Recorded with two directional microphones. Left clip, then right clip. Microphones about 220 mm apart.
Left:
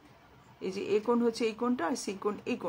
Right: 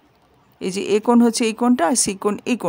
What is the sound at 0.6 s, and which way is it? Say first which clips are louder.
Speech: right 11 dB; 50° right (ahead or behind).